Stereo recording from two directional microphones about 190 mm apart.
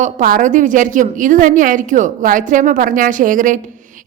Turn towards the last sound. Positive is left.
turn(degrees=-45)  # may be behind; listen again after turning